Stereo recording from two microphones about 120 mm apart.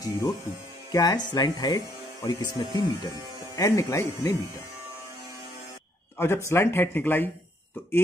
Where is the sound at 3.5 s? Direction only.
25° left (ahead or behind).